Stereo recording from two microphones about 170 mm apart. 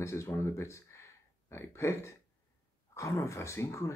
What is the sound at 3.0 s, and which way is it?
Speech, 15° left (ahead or behind).